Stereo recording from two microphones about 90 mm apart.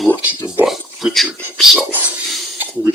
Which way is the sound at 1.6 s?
5° right (ahead or behind).